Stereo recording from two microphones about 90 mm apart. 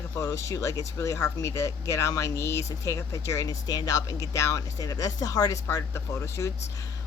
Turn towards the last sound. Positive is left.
turn(degrees=30)  # may be behind; listen again after turning